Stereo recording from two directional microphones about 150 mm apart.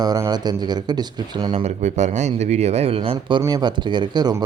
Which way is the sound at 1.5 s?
45° right (ahead or behind).